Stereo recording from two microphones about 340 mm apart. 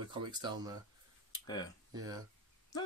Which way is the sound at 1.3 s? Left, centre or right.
Centre.